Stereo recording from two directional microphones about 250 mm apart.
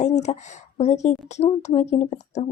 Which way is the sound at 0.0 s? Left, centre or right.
Left.